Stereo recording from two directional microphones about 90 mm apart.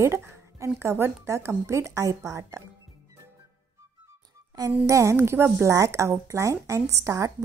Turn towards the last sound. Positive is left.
turn(degrees=-35)  # may be behind; listen again after turning